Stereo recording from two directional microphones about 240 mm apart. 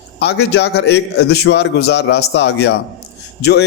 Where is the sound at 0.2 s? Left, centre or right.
Left.